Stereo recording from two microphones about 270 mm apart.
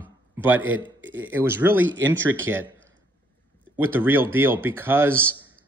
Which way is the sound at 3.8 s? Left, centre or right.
Centre.